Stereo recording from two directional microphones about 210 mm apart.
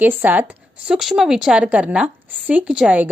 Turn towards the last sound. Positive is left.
turn(degrees=-5)  # may be behind; listen again after turning